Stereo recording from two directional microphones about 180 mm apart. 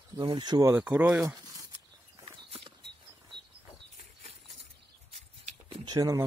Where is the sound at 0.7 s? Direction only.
10° right (ahead or behind).